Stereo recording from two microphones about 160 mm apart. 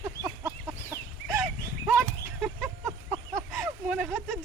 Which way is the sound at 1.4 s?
5° right (ahead or behind).